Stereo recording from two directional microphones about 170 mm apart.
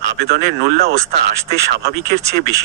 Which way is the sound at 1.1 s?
80° right.